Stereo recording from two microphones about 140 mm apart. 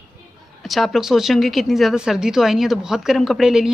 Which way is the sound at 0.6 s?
Centre (ahead or behind).